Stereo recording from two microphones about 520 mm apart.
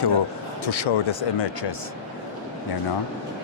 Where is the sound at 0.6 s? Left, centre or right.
Left.